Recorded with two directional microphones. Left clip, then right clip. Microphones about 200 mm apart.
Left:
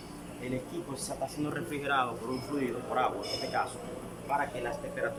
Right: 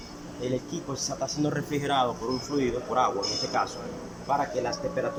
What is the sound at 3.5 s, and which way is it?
Speech, 10° right (ahead or behind).